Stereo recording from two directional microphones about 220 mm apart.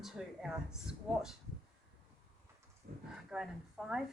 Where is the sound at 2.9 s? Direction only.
45° right (ahead or behind).